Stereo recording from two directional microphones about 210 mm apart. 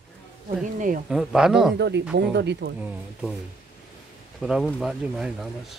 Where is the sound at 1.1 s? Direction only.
5° right (ahead or behind).